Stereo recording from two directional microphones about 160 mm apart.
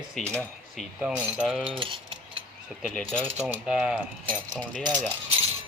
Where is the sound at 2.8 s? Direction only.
5° left (ahead or behind).